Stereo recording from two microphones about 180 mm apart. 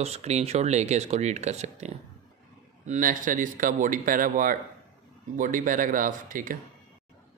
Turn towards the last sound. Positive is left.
turn(degrees=-50)  # may be behind; listen again after turning